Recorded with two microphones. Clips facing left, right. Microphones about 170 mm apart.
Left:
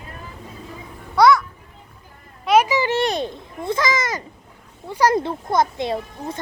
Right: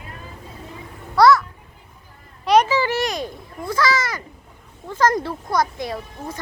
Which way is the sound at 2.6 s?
15° left (ahead or behind).